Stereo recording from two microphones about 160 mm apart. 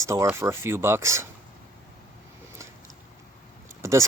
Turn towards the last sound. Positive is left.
turn(degrees=-20)  # may be behind; listen again after turning